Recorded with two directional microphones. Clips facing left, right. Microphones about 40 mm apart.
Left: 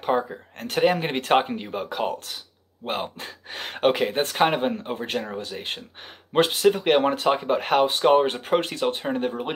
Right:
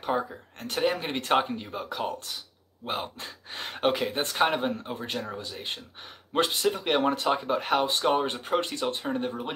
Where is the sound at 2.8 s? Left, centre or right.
Left.